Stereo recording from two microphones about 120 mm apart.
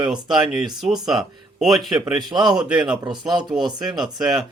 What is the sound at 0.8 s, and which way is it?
Speech, 5° right (ahead or behind).